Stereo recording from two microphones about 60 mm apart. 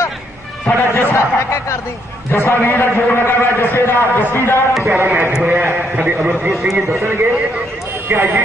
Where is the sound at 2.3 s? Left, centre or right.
Left.